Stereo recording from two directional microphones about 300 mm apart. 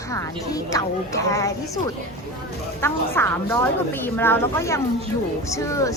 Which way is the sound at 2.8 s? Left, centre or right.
Centre.